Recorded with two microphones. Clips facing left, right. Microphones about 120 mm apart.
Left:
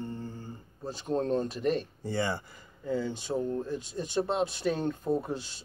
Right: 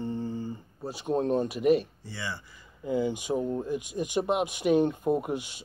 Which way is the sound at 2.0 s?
50° left (ahead or behind).